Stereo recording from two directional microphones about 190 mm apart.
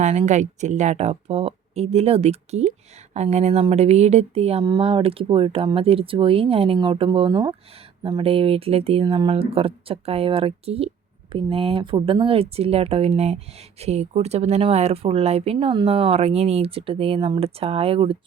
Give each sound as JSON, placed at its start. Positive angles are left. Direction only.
{"t": 0.0, "sound": "speech", "side_deg": -35}